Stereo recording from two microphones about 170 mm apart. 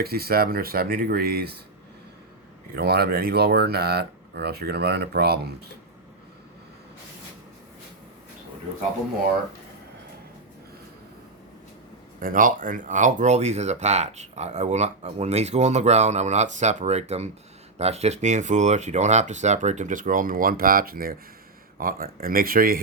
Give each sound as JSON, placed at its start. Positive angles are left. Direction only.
{"t": 0.0, "sound": "speech", "side_deg": -65}
{"t": 2.7, "sound": "speech", "side_deg": -70}
{"t": 12.2, "sound": "speech", "side_deg": -55}